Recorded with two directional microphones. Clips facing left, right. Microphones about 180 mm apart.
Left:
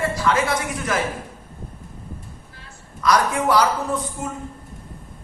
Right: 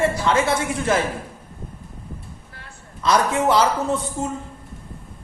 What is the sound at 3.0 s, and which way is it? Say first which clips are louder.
A man's voice: right 1 dB; 25° right (ahead or behind).